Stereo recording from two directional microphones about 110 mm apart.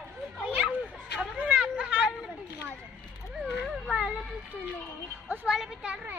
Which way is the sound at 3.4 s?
Centre (ahead or behind).